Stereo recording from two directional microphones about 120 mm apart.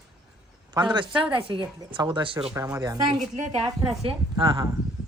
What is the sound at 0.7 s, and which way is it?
A man's voice, 40° right (ahead or behind).